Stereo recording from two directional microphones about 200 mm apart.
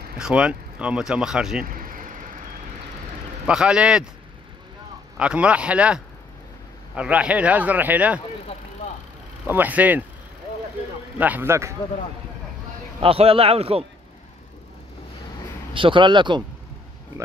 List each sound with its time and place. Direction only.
0.2 s speech: 5° right (ahead or behind)
1.6 s a sound: 45° right (ahead or behind)
3.4 s speech: 5° right (ahead or behind)
5.1 s speech: 5° right (ahead or behind)
9.5 s speech: 10° right (ahead or behind)
11.1 s speech: 10° right (ahead or behind)
13.0 s speech: 30° right (ahead or behind)
15.7 s speech: 25° right (ahead or behind)